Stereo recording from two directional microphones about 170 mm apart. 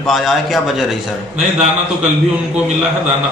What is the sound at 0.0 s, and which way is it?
Speech, centre (ahead or behind).